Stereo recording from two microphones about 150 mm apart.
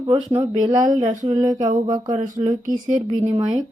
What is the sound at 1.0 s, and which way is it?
Speech, 55° right (ahead or behind).